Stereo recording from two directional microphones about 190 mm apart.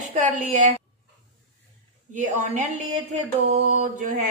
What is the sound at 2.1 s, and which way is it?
A woman's voice, 40° right (ahead or behind).